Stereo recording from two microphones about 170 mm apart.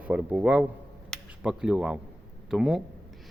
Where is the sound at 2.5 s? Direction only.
5° right (ahead or behind).